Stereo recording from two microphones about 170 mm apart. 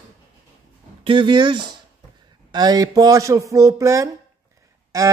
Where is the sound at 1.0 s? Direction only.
30° right (ahead or behind).